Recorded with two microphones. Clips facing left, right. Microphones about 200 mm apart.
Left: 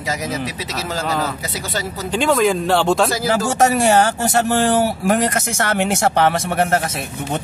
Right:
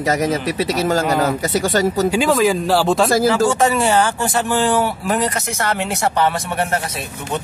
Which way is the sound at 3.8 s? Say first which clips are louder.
Left 2 dB; 45° left (ahead or behind).